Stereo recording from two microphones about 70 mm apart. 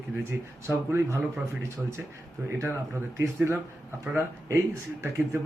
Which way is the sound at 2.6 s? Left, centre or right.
Right.